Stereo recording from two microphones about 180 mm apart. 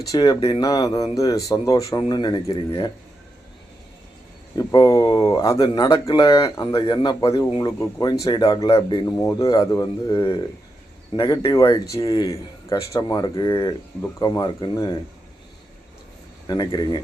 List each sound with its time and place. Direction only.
0.1 s speech: 25° left (ahead or behind)
4.5 s speech: 20° left (ahead or behind)
16.5 s speech: 25° left (ahead or behind)